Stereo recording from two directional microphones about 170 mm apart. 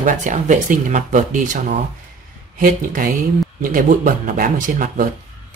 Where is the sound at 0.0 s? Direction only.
50° right (ahead or behind).